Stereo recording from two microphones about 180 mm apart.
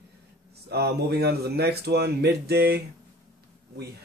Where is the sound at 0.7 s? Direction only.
65° right (ahead or behind).